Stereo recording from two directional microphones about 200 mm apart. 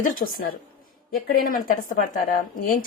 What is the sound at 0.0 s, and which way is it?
Speech, 45° left (ahead or behind).